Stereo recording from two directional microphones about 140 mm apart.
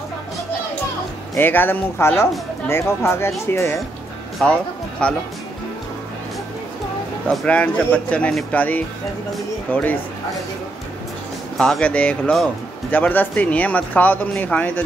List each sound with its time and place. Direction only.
1.3 s speech: 15° left (ahead or behind)
4.4 s speech: 5° left (ahead or behind)
7.2 s speech: 10° left (ahead or behind)
11.5 s speech: 5° left (ahead or behind)